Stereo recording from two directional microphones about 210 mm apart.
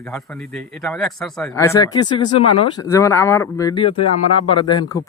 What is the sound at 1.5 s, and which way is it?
Speech, 15° left (ahead or behind).